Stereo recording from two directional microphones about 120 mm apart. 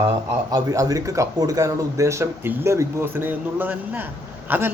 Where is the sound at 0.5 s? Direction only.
30° right (ahead or behind).